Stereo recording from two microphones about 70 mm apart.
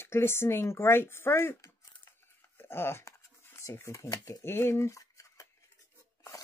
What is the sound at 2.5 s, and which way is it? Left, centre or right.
Speech, left.